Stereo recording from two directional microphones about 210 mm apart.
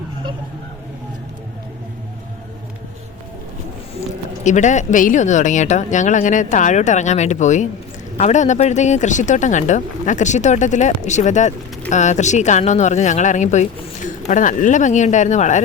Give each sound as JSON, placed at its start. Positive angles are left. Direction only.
{"t": 4.4, "sound": "speech", "side_deg": 35}